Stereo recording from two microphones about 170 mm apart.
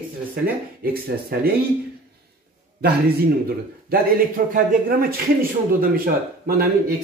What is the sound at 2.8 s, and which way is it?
A man's voice, 65° right (ahead or behind).